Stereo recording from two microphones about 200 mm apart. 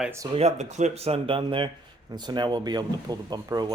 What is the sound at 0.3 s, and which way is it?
Speech, 35° right (ahead or behind).